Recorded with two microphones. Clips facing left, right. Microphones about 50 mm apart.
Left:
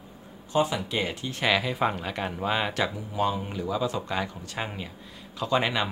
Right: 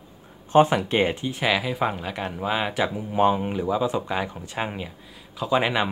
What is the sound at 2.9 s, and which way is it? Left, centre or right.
A man's voice, right.